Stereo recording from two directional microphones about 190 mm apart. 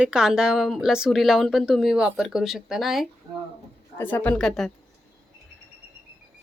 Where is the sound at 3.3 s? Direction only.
20° right (ahead or behind).